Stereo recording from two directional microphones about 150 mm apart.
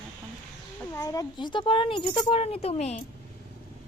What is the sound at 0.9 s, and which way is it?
A child's voice, 25° left (ahead or behind).